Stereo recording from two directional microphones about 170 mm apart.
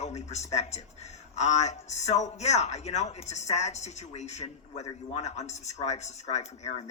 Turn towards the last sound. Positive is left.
turn(degrees=40)  # may be behind; listen again after turning